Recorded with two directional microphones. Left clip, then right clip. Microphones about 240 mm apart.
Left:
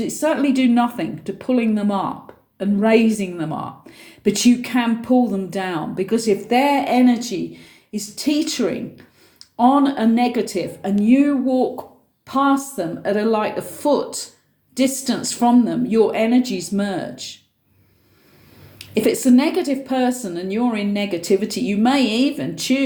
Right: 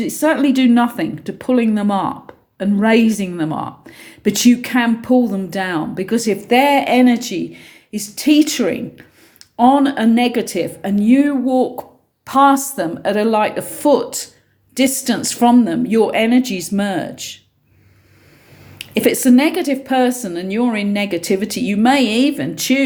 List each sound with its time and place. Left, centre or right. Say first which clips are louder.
0.0 s a woman's voice: right 4 dB; right
18.8 s a woman's voice: right 3 dB; right